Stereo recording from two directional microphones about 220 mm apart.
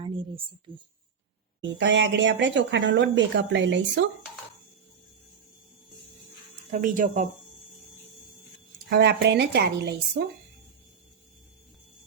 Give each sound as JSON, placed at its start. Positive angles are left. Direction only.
{"t": 0.7, "sound": "speech", "side_deg": -20}
{"t": 1.8, "sound": "a woman's voice", "side_deg": -55}
{"t": 6.7, "sound": "speech", "side_deg": -35}
{"t": 8.9, "sound": "a woman's voice", "side_deg": -50}